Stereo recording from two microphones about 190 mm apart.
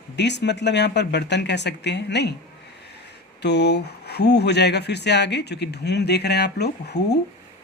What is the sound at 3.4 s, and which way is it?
Speech, 60° left (ahead or behind).